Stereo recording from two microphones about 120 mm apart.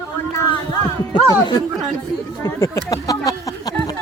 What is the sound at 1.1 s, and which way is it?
Speech, 35° left (ahead or behind).